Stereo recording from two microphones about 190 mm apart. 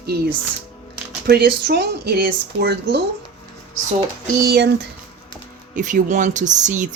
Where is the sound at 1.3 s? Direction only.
55° right (ahead or behind).